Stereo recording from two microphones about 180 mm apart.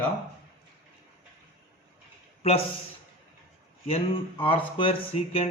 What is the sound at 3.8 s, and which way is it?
Speech, 30° left (ahead or behind).